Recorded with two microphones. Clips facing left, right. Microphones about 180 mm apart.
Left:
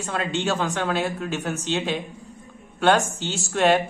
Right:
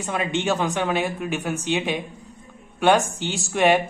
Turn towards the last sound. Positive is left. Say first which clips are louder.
# right 1 dB
turn(degrees=-15)  # may be behind; listen again after turning